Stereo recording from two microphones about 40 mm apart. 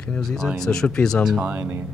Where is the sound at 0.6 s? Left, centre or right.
Centre.